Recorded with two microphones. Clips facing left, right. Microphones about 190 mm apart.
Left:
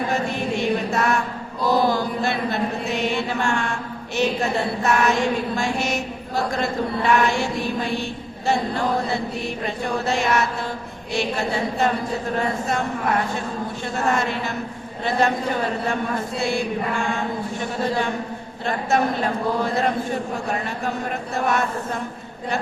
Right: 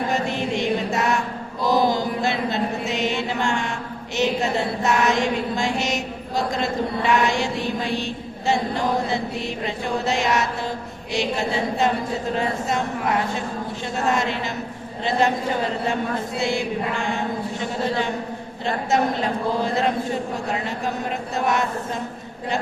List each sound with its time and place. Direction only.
0.1 s chant: 15° right (ahead or behind)
16.4 s a man's voice: 20° right (ahead or behind)
21.3 s a man's voice: 20° right (ahead or behind)